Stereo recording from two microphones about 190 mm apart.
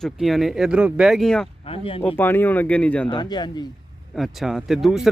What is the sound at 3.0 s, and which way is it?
Speech, 25° left (ahead or behind).